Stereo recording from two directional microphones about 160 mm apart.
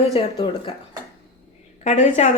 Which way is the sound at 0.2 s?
30° left (ahead or behind).